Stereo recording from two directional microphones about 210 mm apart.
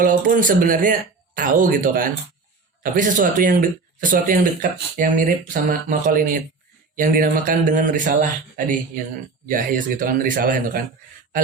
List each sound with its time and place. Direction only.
0.0 s speech: 40° right (ahead or behind)
4.9 s speech: 40° right (ahead or behind)